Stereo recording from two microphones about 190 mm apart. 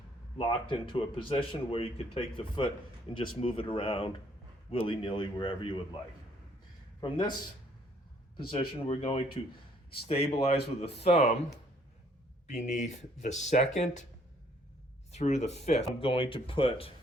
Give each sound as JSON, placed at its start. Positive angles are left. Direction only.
{"t": 0.3, "sound": "speech", "side_deg": 25}
{"t": 7.0, "sound": "speech", "side_deg": 25}
{"t": 8.9, "sound": "speech", "side_deg": 30}
{"t": 12.5, "sound": "speech", "side_deg": 40}
{"t": 15.1, "sound": "speech", "side_deg": 35}